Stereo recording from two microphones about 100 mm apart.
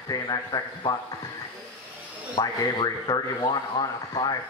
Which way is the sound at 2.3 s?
50° left (ahead or behind).